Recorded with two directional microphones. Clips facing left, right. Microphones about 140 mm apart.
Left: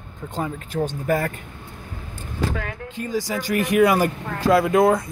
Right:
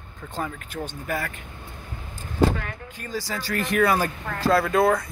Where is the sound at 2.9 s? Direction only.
15° left (ahead or behind).